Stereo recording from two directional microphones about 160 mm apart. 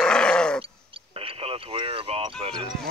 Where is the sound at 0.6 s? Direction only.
35° right (ahead or behind).